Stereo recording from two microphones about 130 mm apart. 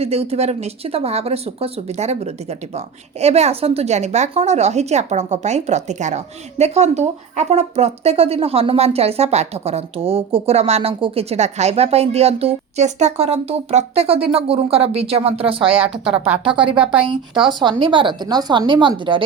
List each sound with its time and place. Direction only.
0.0 s speech: 50° right (ahead or behind)
16.2 s a woman's voice: 10° right (ahead or behind)
16.5 s speech: 40° right (ahead or behind)
16.7 s a woman's voice: 10° right (ahead or behind)
17.1 s speech: 40° right (ahead or behind)